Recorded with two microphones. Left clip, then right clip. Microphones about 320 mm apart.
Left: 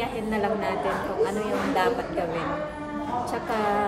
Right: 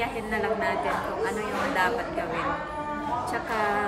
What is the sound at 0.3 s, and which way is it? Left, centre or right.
Speech, centre.